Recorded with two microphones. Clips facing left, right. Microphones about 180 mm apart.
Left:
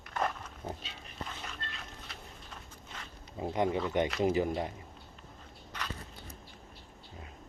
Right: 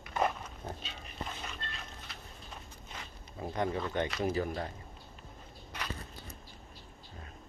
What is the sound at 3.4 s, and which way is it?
Speech, 20° left (ahead or behind).